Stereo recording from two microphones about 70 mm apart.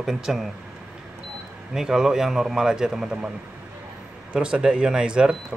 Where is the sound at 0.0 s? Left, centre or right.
Centre.